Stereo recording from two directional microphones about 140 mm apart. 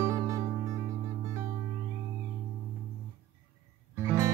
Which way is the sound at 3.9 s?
20° right (ahead or behind).